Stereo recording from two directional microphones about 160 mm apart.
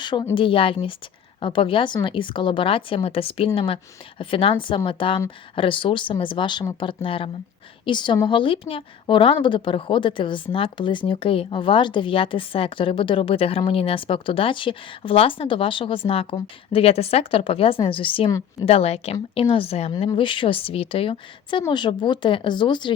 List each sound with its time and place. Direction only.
0.0 s a woman's voice: 30° left (ahead or behind)